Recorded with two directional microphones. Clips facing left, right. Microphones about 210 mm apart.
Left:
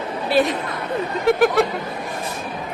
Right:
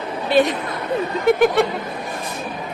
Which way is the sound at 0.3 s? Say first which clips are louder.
Right 2 dB; centre (ahead or behind).